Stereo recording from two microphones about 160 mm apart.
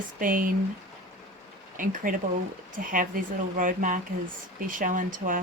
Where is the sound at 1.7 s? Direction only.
55° right (ahead or behind).